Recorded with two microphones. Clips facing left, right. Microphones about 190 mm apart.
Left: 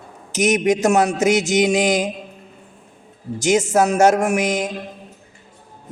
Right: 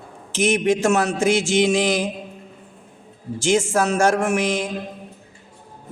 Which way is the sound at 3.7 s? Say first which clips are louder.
Left 4 dB; 20° left (ahead or behind).